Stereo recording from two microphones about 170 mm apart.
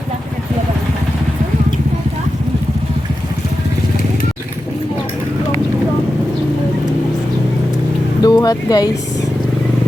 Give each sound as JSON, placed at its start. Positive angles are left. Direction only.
{"t": 8.2, "sound": "vehicle", "side_deg": 20}